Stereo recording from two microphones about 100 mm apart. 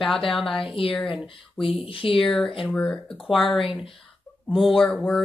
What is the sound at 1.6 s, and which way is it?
Speech, 65° left (ahead or behind).